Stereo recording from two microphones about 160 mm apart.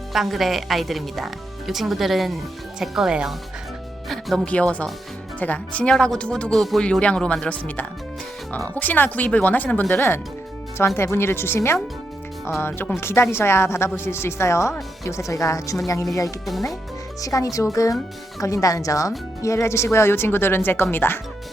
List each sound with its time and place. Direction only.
0.1 s speech: centre (ahead or behind); by 15.8 s 20° left (ahead or behind)
17.2 s speech: 20° left (ahead or behind)